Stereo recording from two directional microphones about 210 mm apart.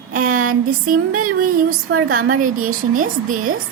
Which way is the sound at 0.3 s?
85° right.